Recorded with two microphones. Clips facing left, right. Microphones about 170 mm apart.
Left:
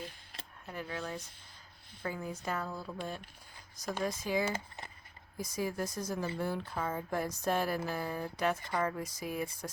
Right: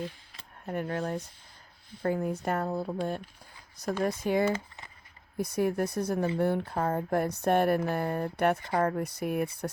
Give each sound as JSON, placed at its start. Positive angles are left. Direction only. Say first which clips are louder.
{"t": 0.7, "sound": "speech", "louder": "right 8 dB", "side_deg": -55}